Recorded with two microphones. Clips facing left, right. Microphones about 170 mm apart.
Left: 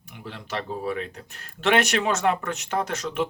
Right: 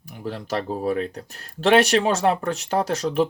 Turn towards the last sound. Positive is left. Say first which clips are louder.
# right 5 dB
turn(degrees=-35)  # may be behind; listen again after turning